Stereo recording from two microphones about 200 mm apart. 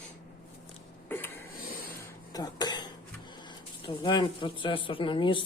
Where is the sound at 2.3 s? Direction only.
20° left (ahead or behind).